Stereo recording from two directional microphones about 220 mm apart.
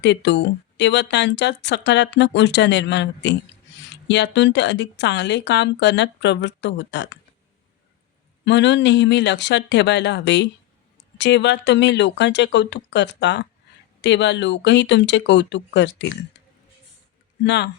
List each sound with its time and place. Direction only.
0.0 s speech: 50° left (ahead or behind)
8.4 s speech: 55° left (ahead or behind)
17.4 s speech: 50° left (ahead or behind)